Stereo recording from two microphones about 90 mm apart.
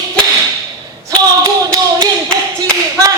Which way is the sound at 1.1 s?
40° right (ahead or behind).